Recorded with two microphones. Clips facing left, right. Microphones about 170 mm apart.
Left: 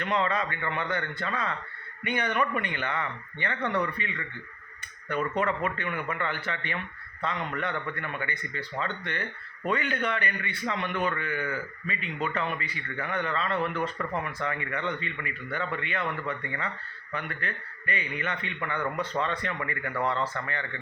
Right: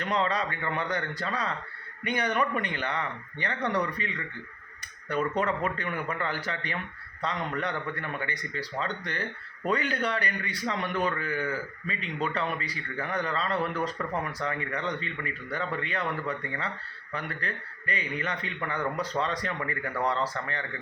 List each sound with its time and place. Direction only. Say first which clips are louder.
0.0 s a man's voice: even; 35° right (ahead or behind)
5.4 s a man's voice: even; 35° right (ahead or behind)
17.2 s a man's voice: even; 35° right (ahead or behind)